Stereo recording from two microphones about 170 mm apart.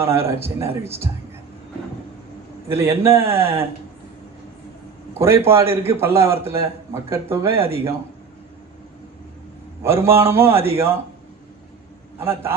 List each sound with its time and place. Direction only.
0.3 s a man's voice: 15° right (ahead or behind)
2.6 s a man's voice: 15° right (ahead or behind)
5.2 s a man's voice: 15° right (ahead or behind)
9.8 s a man's voice: 15° right (ahead or behind)
12.2 s a man's voice: 15° right (ahead or behind)